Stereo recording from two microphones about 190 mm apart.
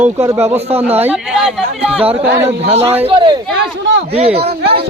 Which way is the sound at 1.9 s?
30° right (ahead or behind).